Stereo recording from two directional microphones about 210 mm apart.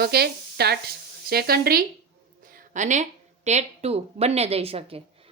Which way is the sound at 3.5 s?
30° right (ahead or behind).